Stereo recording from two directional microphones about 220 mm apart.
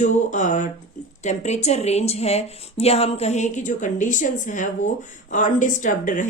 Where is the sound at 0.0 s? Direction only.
35° left (ahead or behind).